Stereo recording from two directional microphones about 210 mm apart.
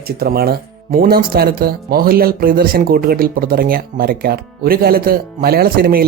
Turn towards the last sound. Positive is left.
turn(degrees=-45)  # may be behind; listen again after turning